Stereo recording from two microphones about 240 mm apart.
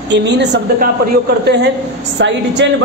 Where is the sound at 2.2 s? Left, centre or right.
Right.